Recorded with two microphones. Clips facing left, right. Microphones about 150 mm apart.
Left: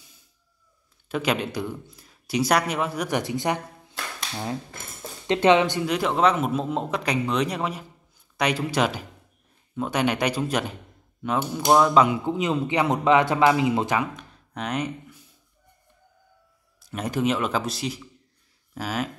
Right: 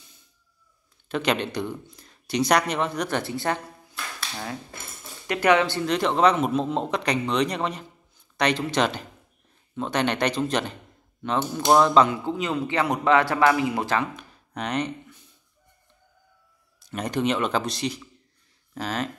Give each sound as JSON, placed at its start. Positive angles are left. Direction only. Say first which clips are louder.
{"t": 1.0, "sound": "speech", "louder": "even", "side_deg": 5}
{"t": 5.2, "sound": "a man's voice", "louder": "left 2 dB", "side_deg": 25}
{"t": 12.1, "sound": "a man's voice", "louder": "left 2 dB", "side_deg": 15}
{"t": 14.1, "sound": "speech", "louder": "right 1 dB", "side_deg": 0}
{"t": 16.9, "sound": "a man's voice", "louder": "even", "side_deg": 5}